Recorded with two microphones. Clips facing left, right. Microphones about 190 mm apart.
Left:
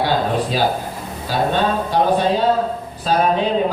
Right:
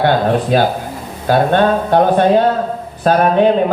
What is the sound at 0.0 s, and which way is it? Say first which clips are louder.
A man's voice: right 5 dB; 55° right (ahead or behind).